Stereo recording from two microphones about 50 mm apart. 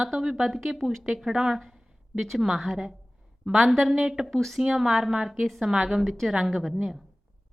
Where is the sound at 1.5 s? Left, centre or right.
Centre.